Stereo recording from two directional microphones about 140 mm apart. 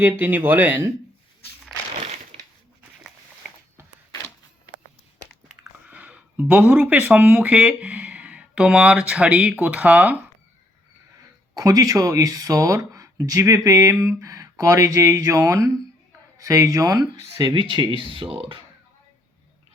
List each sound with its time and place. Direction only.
0.0 s speech: 15° right (ahead or behind)
2.0 s crushing: 50° right (ahead or behind)
5.5 s speech: 10° right (ahead or behind)
11.5 s speech: 25° right (ahead or behind); by 18.6 s 40° right (ahead or behind)